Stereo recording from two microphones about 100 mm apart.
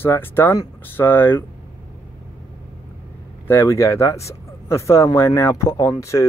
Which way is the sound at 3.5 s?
25° left (ahead or behind).